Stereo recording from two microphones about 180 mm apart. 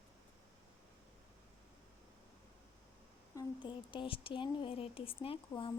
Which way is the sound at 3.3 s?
25° left (ahead or behind).